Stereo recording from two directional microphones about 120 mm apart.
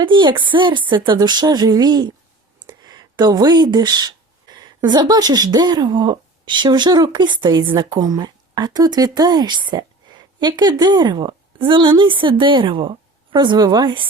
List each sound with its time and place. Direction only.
0.0 s speech: 40° right (ahead or behind)